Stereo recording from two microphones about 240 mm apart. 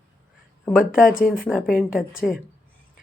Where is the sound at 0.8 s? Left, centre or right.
Left.